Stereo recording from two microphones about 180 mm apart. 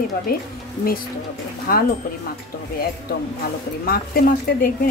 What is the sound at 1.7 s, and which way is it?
Speech, 55° left (ahead or behind).